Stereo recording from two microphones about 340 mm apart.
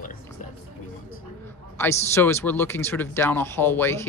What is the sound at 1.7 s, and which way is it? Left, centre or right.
A man's voice, centre.